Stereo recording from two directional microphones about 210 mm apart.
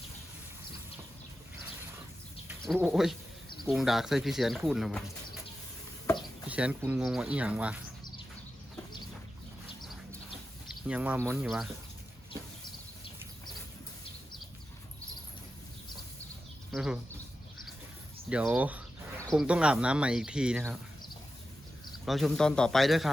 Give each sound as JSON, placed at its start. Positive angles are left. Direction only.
{"t": 2.6, "sound": "speech", "side_deg": -5}
{"t": 6.5, "sound": "speech", "side_deg": -5}
{"t": 10.8, "sound": "speech", "side_deg": -5}
{"t": 16.7, "sound": "speech", "side_deg": 0}
{"t": 18.3, "sound": "speech", "side_deg": -5}
{"t": 22.0, "sound": "speech", "side_deg": 0}